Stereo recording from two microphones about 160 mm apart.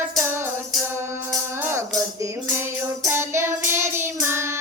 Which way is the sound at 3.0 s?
15° right (ahead or behind).